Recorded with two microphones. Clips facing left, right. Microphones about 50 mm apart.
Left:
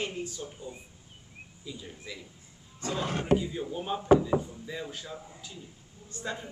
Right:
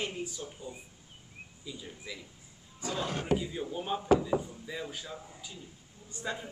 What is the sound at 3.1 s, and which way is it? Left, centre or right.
Speech, left.